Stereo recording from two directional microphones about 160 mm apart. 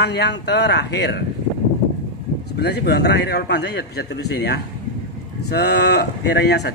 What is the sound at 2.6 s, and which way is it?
A man's voice, 90° left.